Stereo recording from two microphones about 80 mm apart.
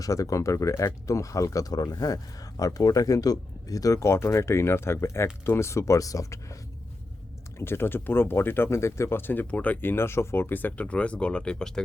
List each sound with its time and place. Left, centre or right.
0.0 s speech: left
7.6 s speech: left; by 11.8 s centre